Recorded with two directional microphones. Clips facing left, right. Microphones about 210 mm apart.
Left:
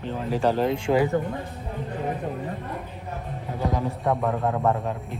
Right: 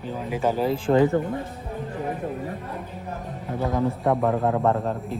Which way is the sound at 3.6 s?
20° left (ahead or behind).